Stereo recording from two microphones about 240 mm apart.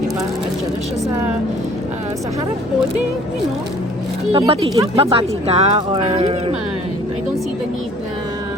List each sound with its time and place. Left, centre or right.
4.3 s speech: right